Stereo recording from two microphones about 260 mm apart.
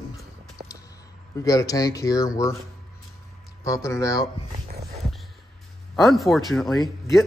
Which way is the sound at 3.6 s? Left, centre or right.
Centre.